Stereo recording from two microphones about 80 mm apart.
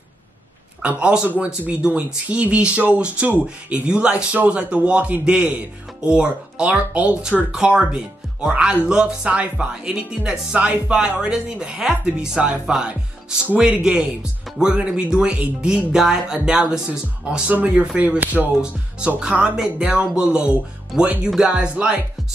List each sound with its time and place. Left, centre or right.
0.8 s speech: centre